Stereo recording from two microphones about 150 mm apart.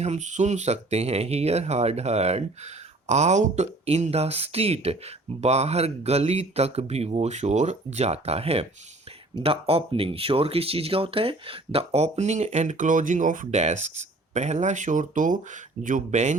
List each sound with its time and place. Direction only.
0.0 s speech: 50° right (ahead or behind)